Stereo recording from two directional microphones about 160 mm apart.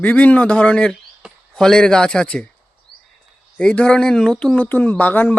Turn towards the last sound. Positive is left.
turn(degrees=10)  # may be behind; listen again after turning